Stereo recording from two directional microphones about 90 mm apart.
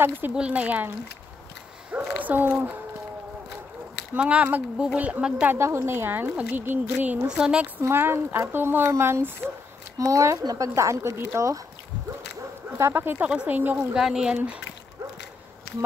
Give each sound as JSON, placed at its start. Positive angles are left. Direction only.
{"t": 0.3, "sound": "a woman's voice", "side_deg": -10}
{"t": 4.1, "sound": "speech", "side_deg": -15}
{"t": 5.6, "sound": "a woman's voice", "side_deg": -30}
{"t": 7.8, "sound": "a woman's voice", "side_deg": -25}
{"t": 12.7, "sound": "a woman's voice", "side_deg": -25}
{"t": 13.9, "sound": "speech", "side_deg": -5}